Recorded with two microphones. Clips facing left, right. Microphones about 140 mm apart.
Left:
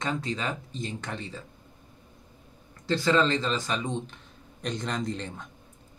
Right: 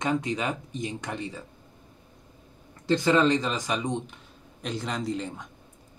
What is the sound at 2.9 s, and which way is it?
A man's voice, 15° right (ahead or behind).